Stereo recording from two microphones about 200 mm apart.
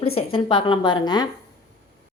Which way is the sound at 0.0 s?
30° left (ahead or behind).